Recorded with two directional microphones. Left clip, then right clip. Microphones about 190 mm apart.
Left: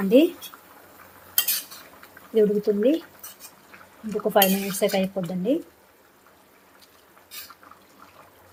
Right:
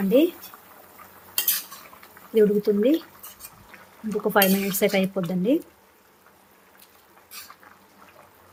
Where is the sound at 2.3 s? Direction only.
15° right (ahead or behind).